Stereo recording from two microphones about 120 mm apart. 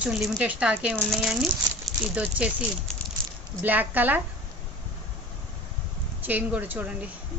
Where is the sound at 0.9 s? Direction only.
Centre (ahead or behind).